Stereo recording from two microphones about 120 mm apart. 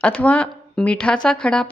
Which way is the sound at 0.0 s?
10° left (ahead or behind).